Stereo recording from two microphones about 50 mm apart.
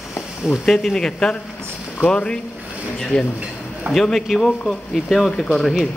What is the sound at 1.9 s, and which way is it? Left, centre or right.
Speech, left.